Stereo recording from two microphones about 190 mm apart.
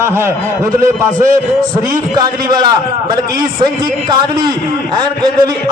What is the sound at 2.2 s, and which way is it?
Speech, 20° right (ahead or behind).